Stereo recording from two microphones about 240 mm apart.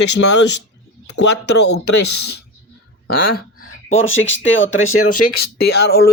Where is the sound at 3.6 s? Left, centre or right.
Left.